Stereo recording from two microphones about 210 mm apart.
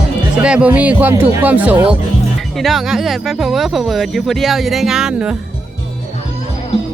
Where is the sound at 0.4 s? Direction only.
5° right (ahead or behind).